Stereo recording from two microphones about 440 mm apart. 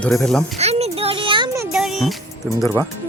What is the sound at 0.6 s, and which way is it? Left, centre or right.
Music, centre.